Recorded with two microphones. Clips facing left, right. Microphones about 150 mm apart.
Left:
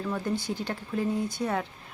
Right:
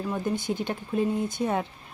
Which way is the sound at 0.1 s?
20° right (ahead or behind).